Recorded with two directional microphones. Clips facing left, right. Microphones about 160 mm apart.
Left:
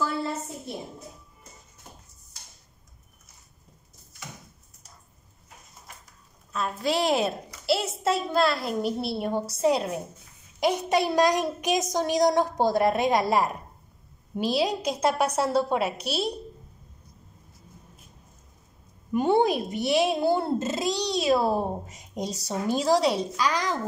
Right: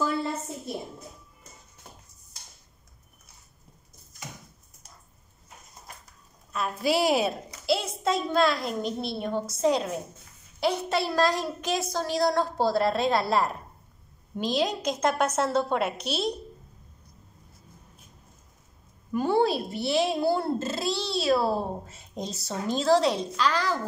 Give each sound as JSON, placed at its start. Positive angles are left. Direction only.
{"t": 6.5, "sound": "a woman's voice", "side_deg": -5}
{"t": 19.1, "sound": "a child's voice", "side_deg": 20}